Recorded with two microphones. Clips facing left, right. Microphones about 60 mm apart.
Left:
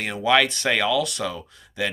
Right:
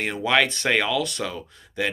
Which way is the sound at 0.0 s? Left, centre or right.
Right.